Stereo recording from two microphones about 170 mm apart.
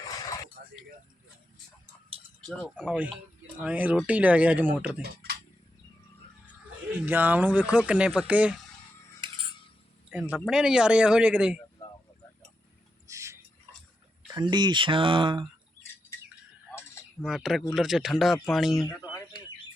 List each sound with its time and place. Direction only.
0.0 s a sound: 20° left (ahead or behind)
2.6 s speech: centre (ahead or behind)
5.0 s typing: 65° right (ahead or behind)
6.9 s speech: 10° right (ahead or behind)
10.1 s speech: 5° right (ahead or behind)
13.1 s a sound: 15° right (ahead or behind)
14.3 s speech: 25° right (ahead or behind)
16.7 s a sound: 15° left (ahead or behind)
17.2 s speech: centre (ahead or behind)